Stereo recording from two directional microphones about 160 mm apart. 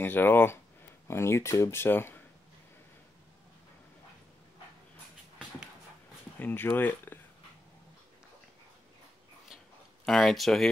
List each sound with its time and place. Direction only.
0.0 s speech: 10° left (ahead or behind)
6.4 s speech: 15° left (ahead or behind)
10.0 s speech: 5° left (ahead or behind)